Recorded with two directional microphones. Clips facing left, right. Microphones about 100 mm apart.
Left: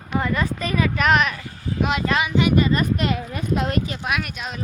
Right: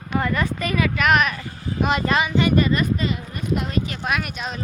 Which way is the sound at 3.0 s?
90° left.